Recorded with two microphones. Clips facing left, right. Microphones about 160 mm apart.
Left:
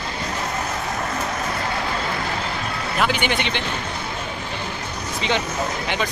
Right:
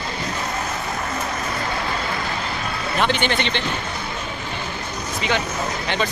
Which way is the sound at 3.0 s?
10° left (ahead or behind).